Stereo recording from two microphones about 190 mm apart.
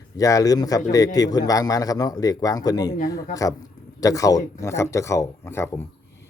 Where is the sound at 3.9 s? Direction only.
15° left (ahead or behind).